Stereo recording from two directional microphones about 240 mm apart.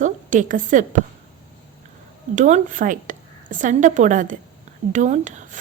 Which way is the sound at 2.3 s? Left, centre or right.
Right.